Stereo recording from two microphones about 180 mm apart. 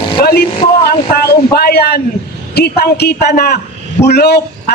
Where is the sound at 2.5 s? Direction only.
60° left (ahead or behind).